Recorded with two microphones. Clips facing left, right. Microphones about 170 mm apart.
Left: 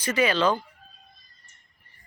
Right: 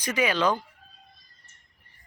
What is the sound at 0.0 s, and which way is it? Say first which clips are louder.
Speech: left 2 dB; 10° right (ahead or behind).